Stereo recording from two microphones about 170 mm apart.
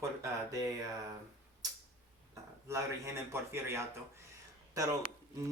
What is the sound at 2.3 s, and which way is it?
Speech, 15° right (ahead or behind).